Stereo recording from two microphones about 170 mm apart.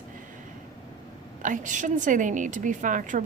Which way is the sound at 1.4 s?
50° right (ahead or behind).